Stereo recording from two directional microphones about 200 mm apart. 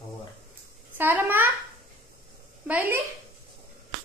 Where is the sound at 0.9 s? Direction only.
10° right (ahead or behind).